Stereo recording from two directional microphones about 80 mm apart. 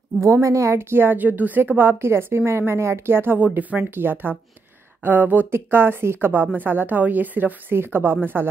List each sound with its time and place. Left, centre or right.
0.2 s a woman's voice: right